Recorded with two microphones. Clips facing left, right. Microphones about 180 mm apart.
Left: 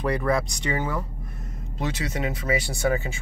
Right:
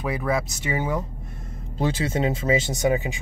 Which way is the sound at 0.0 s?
Centre (ahead or behind).